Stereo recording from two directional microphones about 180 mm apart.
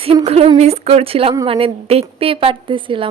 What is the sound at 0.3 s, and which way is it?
A woman's voice, 35° right (ahead or behind).